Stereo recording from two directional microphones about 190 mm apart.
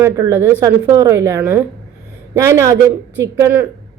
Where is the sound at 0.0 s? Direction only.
15° right (ahead or behind).